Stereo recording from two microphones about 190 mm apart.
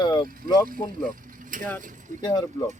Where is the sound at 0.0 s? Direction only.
25° left (ahead or behind).